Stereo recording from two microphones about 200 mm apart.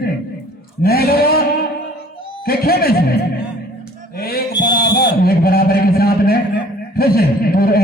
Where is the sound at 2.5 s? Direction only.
50° left (ahead or behind).